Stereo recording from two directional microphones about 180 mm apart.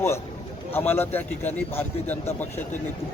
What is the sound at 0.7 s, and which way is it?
A man's voice, 10° left (ahead or behind).